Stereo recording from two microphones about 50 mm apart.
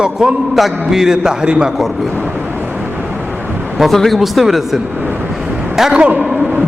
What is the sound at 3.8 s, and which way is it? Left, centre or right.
A man's voice, centre.